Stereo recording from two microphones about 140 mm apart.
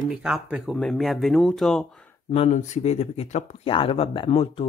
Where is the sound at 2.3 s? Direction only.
50° left (ahead or behind).